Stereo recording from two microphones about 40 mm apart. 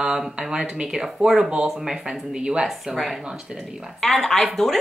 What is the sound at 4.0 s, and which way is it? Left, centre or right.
Speech, centre.